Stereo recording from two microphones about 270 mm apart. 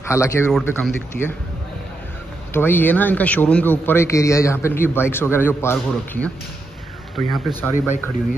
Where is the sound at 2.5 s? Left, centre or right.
Centre.